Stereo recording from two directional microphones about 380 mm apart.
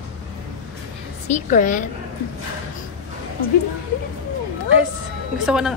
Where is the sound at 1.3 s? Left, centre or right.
Left.